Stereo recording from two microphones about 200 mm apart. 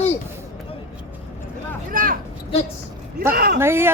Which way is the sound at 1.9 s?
45° right (ahead or behind).